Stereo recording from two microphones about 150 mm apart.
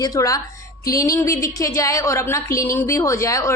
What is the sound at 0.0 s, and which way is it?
Speech, 25° left (ahead or behind).